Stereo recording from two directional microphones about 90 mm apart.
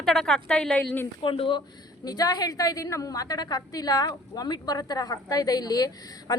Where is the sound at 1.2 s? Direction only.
80° left.